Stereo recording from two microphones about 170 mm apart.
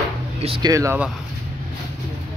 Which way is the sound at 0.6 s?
20° right (ahead or behind).